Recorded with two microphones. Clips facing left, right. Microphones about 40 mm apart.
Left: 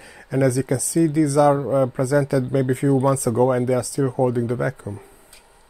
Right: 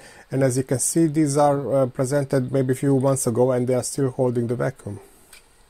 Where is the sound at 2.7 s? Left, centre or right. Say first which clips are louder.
Left 1 dB; left.